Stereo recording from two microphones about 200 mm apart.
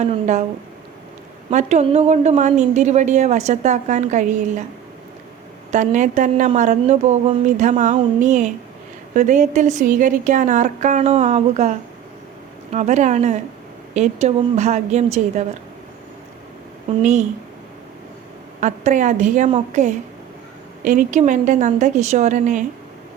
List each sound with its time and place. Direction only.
0.0 s a woman's voice: 35° right (ahead or behind)
1.5 s a woman's voice: 35° right (ahead or behind)
5.7 s a woman's voice: 40° right (ahead or behind)
17.0 s a woman's voice: 35° right (ahead or behind)
18.6 s a woman's voice: 40° right (ahead or behind)